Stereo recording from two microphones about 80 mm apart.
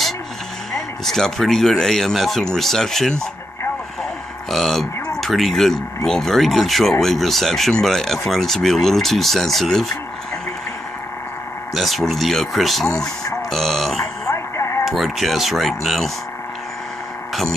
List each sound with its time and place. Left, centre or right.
0.7 s speech: centre
4.5 s speech: centre
11.7 s speech: centre
13.3 s a sound: centre
14.2 s radio: left
14.9 s speech: centre
17.3 s a sound: centre